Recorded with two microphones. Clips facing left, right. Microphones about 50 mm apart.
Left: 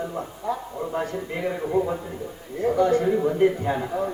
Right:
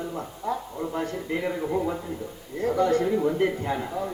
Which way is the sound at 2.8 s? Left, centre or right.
Left.